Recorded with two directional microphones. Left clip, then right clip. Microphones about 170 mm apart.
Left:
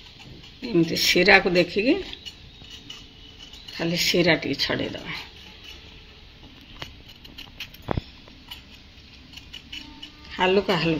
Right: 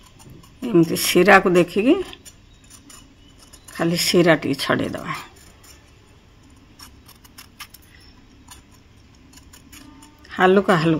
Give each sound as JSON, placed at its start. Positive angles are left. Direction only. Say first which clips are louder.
{"t": 0.6, "sound": "speech", "louder": "right 4 dB", "side_deg": -50}
{"t": 3.7, "sound": "speech", "louder": "right 4 dB", "side_deg": -70}
{"t": 10.3, "sound": "speech", "louder": "right 5 dB", "side_deg": -70}